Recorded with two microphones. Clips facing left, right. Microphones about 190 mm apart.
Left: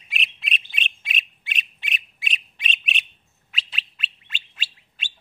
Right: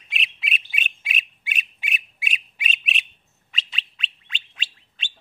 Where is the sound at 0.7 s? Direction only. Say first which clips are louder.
Even; 10° right (ahead or behind).